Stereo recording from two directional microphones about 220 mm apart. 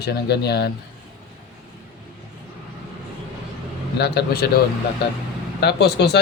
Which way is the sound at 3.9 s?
45° left (ahead or behind).